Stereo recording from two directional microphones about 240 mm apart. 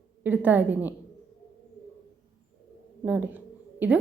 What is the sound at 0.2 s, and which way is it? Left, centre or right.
Speech, centre.